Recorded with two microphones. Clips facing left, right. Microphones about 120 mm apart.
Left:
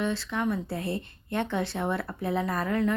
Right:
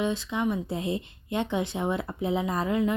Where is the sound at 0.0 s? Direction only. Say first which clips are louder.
Right 1 dB; 15° right (ahead or behind).